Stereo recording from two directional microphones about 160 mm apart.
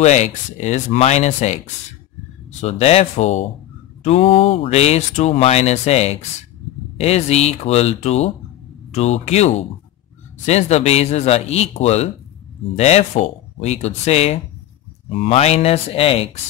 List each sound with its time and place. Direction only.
0.0 s speech: 45° left (ahead or behind)
2.6 s speech: 40° left (ahead or behind)